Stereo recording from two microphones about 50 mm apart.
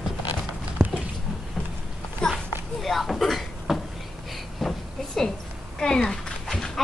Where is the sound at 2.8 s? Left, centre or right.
Centre.